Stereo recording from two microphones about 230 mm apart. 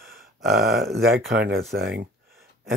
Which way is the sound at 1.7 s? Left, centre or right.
Right.